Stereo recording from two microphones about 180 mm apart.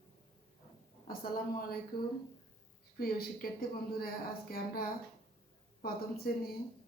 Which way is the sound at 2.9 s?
55° left (ahead or behind).